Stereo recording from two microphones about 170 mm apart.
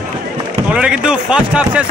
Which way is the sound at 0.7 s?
5° right (ahead or behind).